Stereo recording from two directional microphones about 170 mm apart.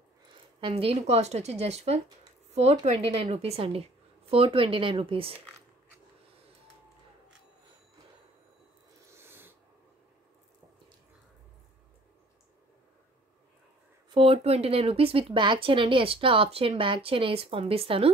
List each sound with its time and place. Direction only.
0.6 s speech: 30° right (ahead or behind)
9.1 s snort: 15° right (ahead or behind)
14.1 s speech: 35° right (ahead or behind)